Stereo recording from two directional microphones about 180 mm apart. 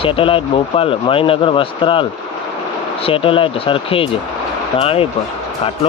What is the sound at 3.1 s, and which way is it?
Speech, 30° left (ahead or behind).